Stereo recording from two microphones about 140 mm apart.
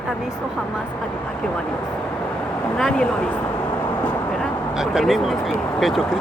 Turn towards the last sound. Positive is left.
turn(degrees=0)  # may be behind; listen again after turning